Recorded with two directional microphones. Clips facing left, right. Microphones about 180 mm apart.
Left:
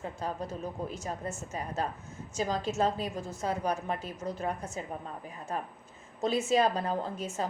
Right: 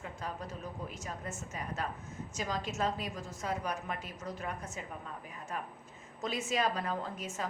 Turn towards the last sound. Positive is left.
turn(degrees=30)  # may be behind; listen again after turning